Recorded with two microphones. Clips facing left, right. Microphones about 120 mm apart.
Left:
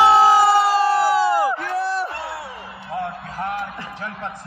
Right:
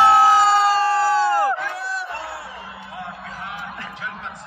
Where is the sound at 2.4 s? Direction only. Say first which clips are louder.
Left 2 dB; 30° left (ahead or behind).